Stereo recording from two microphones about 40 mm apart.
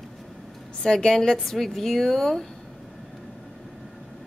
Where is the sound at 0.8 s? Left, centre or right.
Centre.